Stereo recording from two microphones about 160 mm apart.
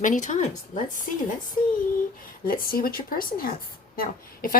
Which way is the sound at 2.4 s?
65° left (ahead or behind).